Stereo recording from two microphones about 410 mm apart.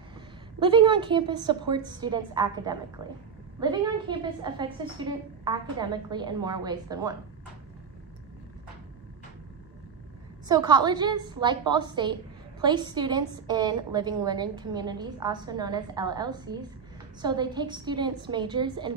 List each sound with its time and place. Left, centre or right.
0.6 s a woman's voice: centre
10.5 s a woman's voice: centre